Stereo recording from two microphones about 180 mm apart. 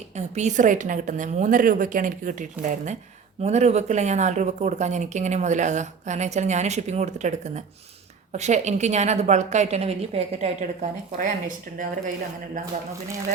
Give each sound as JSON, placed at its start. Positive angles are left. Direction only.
{"t": 0.2, "sound": "a woman's voice", "side_deg": -40}
{"t": 11.2, "sound": "a woman's voice", "side_deg": -45}